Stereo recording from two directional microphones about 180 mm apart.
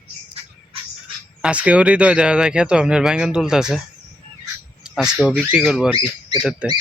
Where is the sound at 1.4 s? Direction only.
5° right (ahead or behind).